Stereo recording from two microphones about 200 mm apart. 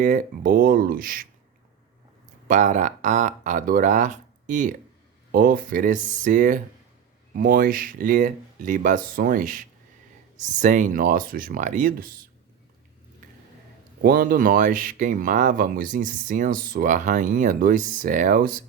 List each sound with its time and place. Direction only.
0.0 s speech: 45° right (ahead or behind)
2.5 s speech: 40° right (ahead or behind)
14.0 s speech: 45° right (ahead or behind)